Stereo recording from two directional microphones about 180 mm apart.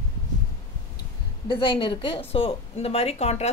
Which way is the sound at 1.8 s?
25° left (ahead or behind).